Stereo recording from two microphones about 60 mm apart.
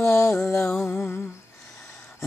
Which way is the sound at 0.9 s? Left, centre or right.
Left.